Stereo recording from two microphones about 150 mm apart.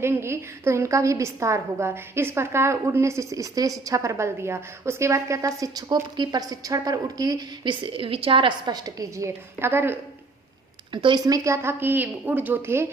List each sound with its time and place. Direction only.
0.0 s a woman's voice: 15° right (ahead or behind)
10.9 s a woman's voice: 30° right (ahead or behind); by 12.9 s 15° right (ahead or behind)